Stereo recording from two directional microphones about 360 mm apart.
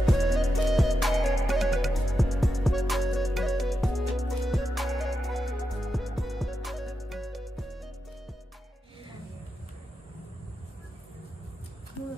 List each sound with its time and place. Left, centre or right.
0.0 s music: centre